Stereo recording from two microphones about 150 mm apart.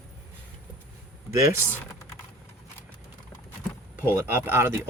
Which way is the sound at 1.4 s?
20° right (ahead or behind).